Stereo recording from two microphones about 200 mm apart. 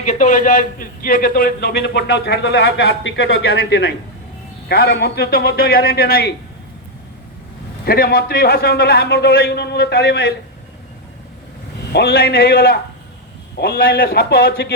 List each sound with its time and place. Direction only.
0.0 s a man's voice: 40° left (ahead or behind); by 3.8 s 65° left (ahead or behind)
4.7 s a man's voice: 50° left (ahead or behind)
7.9 s a man's voice: 50° left (ahead or behind)
11.9 s a man's voice: 55° left (ahead or behind)